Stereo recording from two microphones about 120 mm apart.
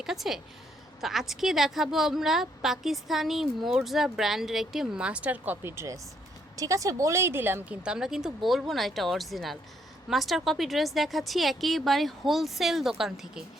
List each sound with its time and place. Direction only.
0.0 s a woman's voice: 5° right (ahead or behind)